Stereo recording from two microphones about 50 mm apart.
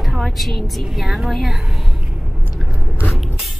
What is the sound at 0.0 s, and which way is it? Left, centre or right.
A woman's voice, centre.